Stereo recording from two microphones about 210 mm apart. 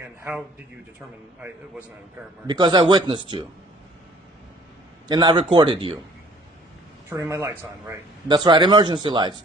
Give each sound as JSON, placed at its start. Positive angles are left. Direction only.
{"t": 2.5, "sound": "speech", "side_deg": -20}
{"t": 5.0, "sound": "speech", "side_deg": -20}
{"t": 7.1, "sound": "speech", "side_deg": -15}